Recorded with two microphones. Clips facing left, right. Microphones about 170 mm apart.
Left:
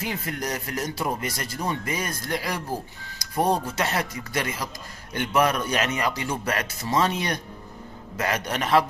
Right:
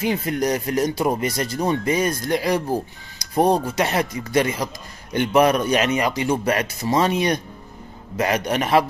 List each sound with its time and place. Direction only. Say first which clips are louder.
0.0 s speech: right 9 dB; 20° right (ahead or behind)